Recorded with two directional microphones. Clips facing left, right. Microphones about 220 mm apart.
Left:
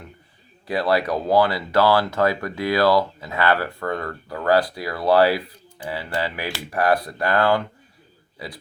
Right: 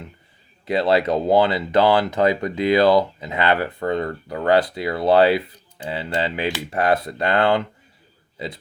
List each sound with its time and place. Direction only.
0.6 s speech: 20° right (ahead or behind)